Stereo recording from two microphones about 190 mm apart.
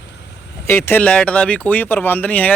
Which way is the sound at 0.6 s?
10° left (ahead or behind).